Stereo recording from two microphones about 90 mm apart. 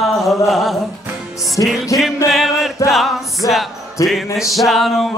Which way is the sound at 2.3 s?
Centre (ahead or behind).